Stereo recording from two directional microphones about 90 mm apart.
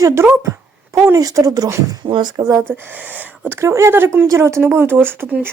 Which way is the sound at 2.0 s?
55° right (ahead or behind).